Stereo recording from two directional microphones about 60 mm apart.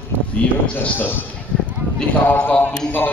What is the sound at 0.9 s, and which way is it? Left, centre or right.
Speech, left.